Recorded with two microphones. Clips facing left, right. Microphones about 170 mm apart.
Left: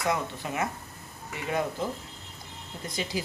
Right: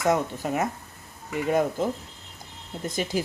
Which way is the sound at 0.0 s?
45° right (ahead or behind).